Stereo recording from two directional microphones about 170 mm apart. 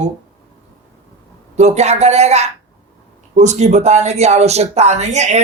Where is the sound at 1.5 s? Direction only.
40° right (ahead or behind).